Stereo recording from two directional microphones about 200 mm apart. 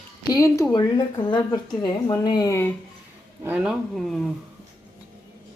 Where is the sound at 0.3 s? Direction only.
15° left (ahead or behind).